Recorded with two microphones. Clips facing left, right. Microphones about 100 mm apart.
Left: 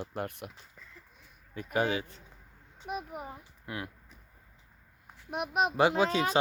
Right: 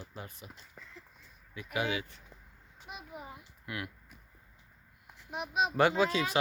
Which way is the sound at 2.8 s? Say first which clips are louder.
Left 7 dB; 50° left (ahead or behind).